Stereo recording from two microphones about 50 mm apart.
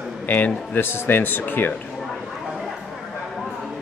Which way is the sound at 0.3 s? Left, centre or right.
Left.